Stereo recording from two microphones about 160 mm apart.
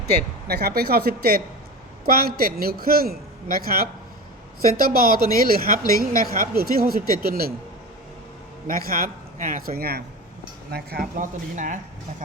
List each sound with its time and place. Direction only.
0.0 s a man's voice: 85° right; by 7.5 s 70° right (ahead or behind)
8.6 s a man's voice: 65° right (ahead or behind)